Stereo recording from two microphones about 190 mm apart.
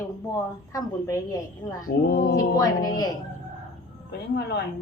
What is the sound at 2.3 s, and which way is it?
Speech, 20° left (ahead or behind).